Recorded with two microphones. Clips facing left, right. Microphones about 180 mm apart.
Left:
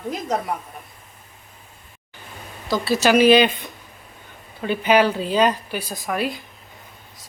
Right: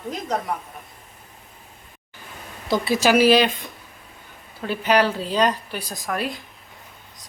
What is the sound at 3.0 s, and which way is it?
A woman's voice, 5° right (ahead or behind).